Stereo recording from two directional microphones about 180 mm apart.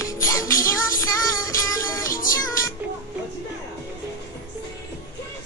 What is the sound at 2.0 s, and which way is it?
Music, 50° left (ahead or behind).